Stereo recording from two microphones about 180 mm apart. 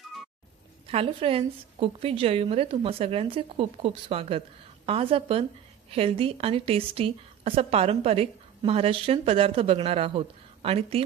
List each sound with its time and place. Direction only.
0.9 s a woman's voice: 30° right (ahead or behind)